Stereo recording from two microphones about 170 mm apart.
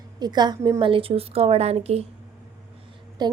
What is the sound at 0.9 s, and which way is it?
Speech, 30° right (ahead or behind).